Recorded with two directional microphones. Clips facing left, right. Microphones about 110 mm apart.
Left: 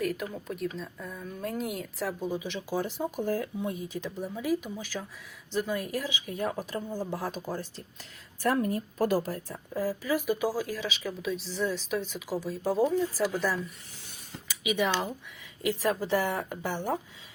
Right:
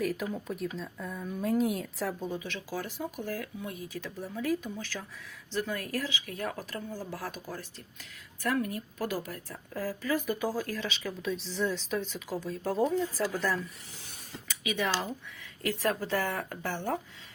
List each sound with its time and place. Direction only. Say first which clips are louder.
0.0 s a woman's voice: even; centre (ahead or behind); by 9.4 s 35° left (ahead or behind)
9.5 s speech: left 4 dB; 15° left (ahead or behind)